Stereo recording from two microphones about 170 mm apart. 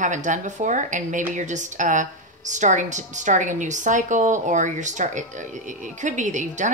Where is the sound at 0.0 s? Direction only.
45° right (ahead or behind).